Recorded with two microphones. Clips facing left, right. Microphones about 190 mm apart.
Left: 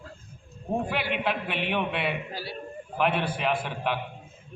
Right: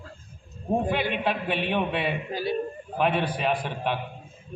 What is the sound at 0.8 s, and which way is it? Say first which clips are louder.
A man's voice: right 3 dB; 20° right (ahead or behind).